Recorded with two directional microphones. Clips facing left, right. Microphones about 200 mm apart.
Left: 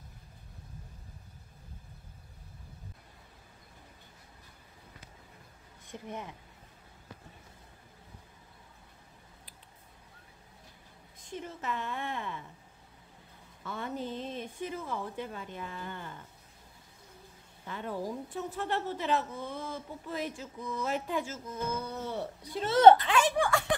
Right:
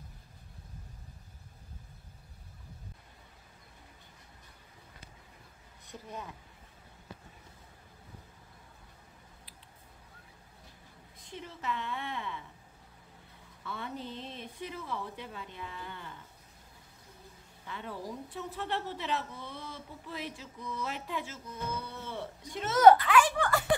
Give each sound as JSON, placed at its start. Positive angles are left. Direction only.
{"t": 6.0, "sound": "speech", "side_deg": 20}
{"t": 11.2, "sound": "a sound", "side_deg": 45}
{"t": 13.7, "sound": "a woman's voice", "side_deg": 45}
{"t": 17.6, "sound": "a woman's voice", "side_deg": 45}
{"t": 23.5, "sound": "giggle", "side_deg": -5}